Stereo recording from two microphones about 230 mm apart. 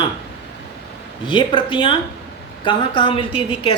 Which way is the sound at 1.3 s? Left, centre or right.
Left.